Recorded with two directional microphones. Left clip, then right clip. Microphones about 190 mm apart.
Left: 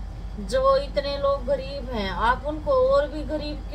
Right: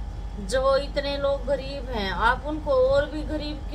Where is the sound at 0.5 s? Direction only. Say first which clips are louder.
Left 2 dB; 15° right (ahead or behind).